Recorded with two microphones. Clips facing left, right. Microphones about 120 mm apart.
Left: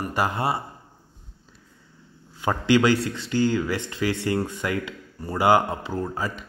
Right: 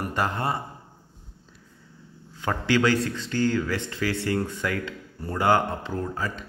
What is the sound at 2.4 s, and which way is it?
A man's voice, 15° left (ahead or behind).